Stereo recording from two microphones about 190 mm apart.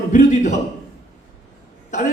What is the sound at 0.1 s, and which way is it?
Speech, 40° left (ahead or behind).